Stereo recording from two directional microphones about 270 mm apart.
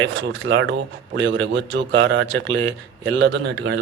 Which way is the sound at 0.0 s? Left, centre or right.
Right.